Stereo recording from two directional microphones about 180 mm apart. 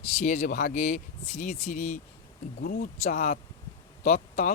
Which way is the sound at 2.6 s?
55° left (ahead or behind).